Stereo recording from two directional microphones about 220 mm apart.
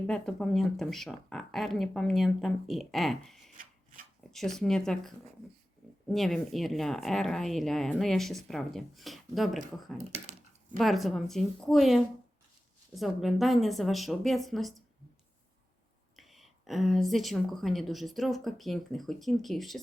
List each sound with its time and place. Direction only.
0.1 s speech: 5° left (ahead or behind)
10.8 s speech: centre (ahead or behind)
16.1 s speech: centre (ahead or behind)